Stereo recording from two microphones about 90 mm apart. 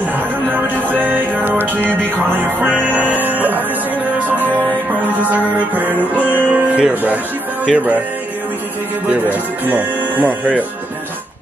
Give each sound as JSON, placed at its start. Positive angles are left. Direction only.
{"t": 0.5, "sound": "music", "side_deg": -20}
{"t": 3.0, "sound": "speech", "side_deg": -20}
{"t": 5.3, "sound": "music", "side_deg": -20}
{"t": 9.1, "sound": "speech", "side_deg": -20}